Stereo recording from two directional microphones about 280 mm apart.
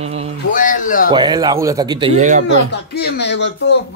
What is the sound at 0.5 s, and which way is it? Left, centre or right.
Speech, left.